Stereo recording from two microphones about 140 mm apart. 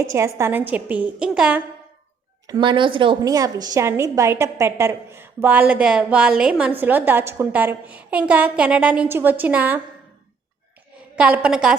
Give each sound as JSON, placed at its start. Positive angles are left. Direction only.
{"t": 0.0, "sound": "a woman's voice", "side_deg": -20}
{"t": 2.5, "sound": "a woman's voice", "side_deg": -35}
{"t": 3.3, "sound": "a woman's voice", "side_deg": -25}
{"t": 11.2, "sound": "a woman's voice", "side_deg": -5}